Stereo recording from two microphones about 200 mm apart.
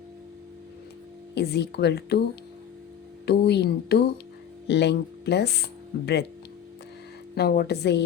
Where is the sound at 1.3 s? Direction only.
55° left (ahead or behind).